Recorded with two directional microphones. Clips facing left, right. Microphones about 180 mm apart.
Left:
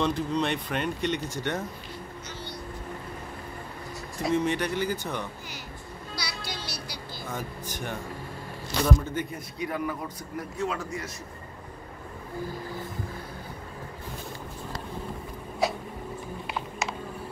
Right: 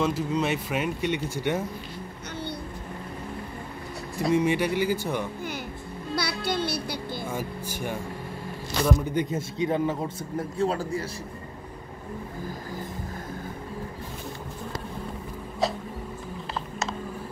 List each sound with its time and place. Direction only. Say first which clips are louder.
0.0 s speech: right 1 dB; 5° right (ahead or behind)
4.4 s speech: right 3 dB; 10° right (ahead or behind)
6.1 s music: right 10 dB; 55° right (ahead or behind)
7.2 s speech: right 3 dB; 10° right (ahead or behind); by 11.1 s 30° right (ahead or behind)
15.6 s music: even; centre (ahead or behind)